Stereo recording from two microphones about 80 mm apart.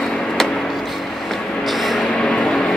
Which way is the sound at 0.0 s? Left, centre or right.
Centre.